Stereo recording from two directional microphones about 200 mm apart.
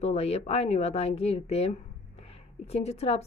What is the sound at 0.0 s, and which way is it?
Speech, 30° left (ahead or behind).